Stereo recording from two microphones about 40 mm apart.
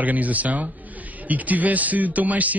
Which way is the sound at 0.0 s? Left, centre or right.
Right.